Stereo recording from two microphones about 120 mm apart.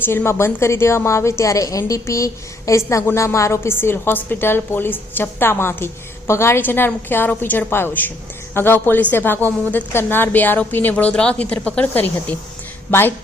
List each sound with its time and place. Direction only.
0.0 s a woman's voice: 20° left (ahead or behind)